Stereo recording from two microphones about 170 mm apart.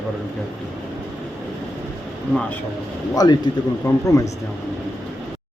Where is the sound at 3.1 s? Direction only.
20° left (ahead or behind).